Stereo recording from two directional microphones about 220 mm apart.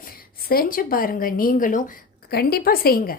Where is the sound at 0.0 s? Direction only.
40° left (ahead or behind).